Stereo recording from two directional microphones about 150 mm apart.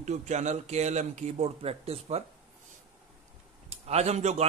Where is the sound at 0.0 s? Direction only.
50° right (ahead or behind).